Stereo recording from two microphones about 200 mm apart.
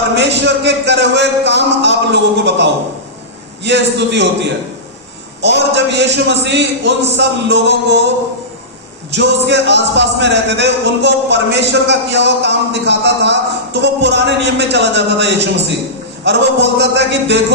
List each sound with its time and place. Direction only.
0.2 s speech: 60° right (ahead or behind)
5.4 s speech: 60° right (ahead or behind)
9.1 s speech: 60° right (ahead or behind)